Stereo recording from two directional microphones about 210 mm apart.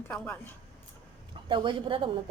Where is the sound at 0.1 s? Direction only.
10° left (ahead or behind).